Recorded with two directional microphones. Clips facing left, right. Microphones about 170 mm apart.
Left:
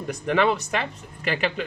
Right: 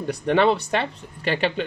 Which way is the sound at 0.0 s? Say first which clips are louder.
Right 3 dB; 30° right (ahead or behind).